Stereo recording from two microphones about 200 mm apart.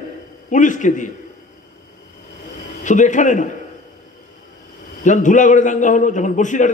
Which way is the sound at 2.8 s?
40° left (ahead or behind).